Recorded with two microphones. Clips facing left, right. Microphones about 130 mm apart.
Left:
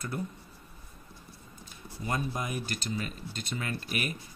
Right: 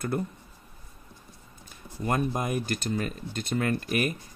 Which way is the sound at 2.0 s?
50° right (ahead or behind).